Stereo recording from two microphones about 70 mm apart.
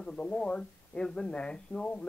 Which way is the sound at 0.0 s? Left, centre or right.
Centre.